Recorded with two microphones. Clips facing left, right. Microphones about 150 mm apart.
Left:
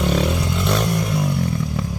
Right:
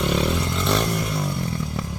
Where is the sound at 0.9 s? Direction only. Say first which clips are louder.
Left 4 dB; centre (ahead or behind).